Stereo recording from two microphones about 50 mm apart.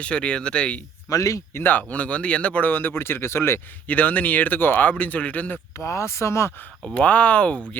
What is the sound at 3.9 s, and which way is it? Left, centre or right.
Speech, left.